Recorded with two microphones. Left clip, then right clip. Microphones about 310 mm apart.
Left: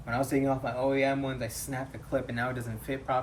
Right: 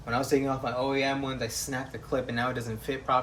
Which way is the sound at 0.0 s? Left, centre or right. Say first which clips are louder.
Right 2 dB; centre.